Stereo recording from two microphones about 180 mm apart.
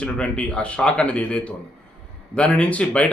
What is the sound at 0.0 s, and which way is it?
A man's voice, 5° left (ahead or behind).